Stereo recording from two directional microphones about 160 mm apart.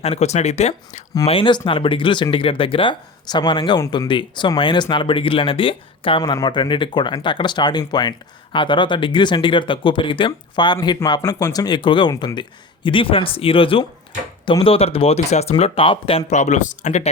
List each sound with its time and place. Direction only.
0.0 s speech: 40° left (ahead or behind)